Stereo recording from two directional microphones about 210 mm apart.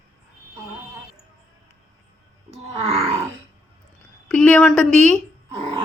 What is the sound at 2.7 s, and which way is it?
Grunt, 30° right (ahead or behind).